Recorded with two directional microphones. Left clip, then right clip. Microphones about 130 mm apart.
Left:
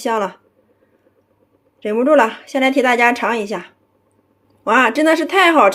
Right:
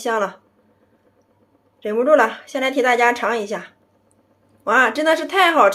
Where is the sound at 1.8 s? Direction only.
35° left (ahead or behind).